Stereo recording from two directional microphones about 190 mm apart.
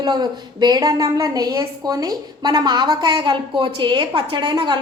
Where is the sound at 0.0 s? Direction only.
20° right (ahead or behind).